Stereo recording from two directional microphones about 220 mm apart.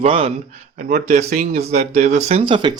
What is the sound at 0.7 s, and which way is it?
Speech, 35° right (ahead or behind).